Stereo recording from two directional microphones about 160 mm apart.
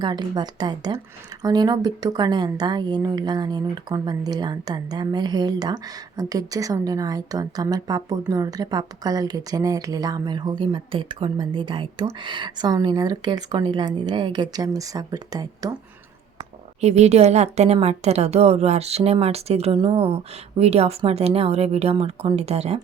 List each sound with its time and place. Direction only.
0.0 s speech: 25° right (ahead or behind)
16.8 s a woman's voice: 45° right (ahead or behind)